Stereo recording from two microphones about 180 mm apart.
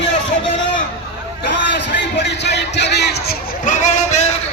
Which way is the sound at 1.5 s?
75° left (ahead or behind).